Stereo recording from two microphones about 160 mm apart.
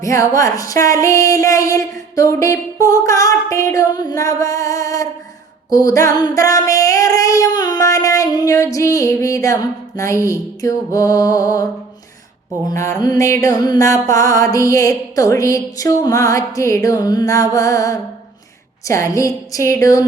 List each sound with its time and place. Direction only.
0.0 s mantra: 20° left (ahead or behind)
5.7 s female singing: 20° left (ahead or behind)
10.9 s mantra: 20° left (ahead or behind)